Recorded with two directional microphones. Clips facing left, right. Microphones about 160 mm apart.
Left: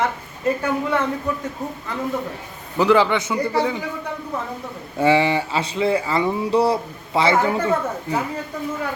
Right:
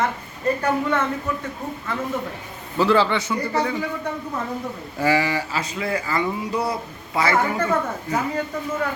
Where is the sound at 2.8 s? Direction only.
15° left (ahead or behind).